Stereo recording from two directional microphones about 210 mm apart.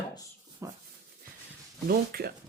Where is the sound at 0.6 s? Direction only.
15° right (ahead or behind).